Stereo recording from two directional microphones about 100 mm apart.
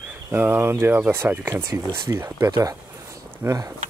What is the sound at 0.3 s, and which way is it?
Speech, 25° right (ahead or behind).